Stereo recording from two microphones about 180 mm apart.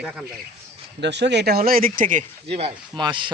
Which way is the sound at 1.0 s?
70° right (ahead or behind).